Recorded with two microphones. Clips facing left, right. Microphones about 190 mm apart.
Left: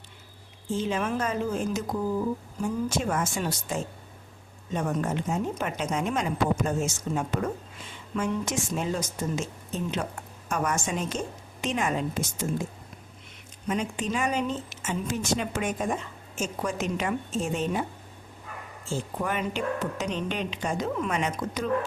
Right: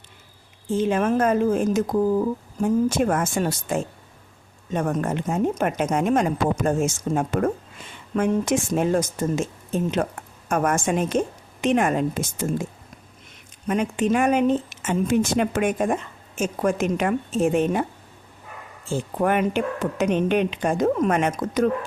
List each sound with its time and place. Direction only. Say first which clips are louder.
0.8 s speech: right 8 dB; 50° right (ahead or behind)
13.7 s speech: right 7 dB; 60° right (ahead or behind)
18.9 s speech: right 8 dB; 55° right (ahead or behind)